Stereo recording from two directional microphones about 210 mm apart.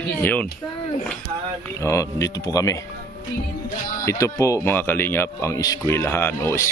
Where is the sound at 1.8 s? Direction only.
15° left (ahead or behind).